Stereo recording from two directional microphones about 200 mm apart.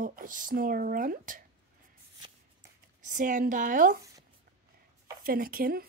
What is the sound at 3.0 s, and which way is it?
A woman's voice, 40° right (ahead or behind).